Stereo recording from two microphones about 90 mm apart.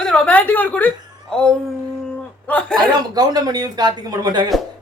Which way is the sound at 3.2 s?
45° right (ahead or behind).